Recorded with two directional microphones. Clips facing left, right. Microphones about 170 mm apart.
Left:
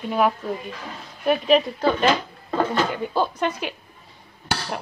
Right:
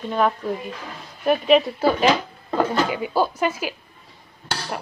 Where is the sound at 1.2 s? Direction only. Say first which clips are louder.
Right 1 dB; centre (ahead or behind).